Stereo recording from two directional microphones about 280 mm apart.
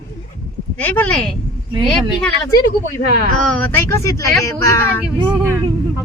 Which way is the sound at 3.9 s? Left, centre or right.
Centre.